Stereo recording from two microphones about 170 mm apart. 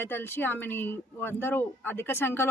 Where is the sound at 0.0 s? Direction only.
10° left (ahead or behind).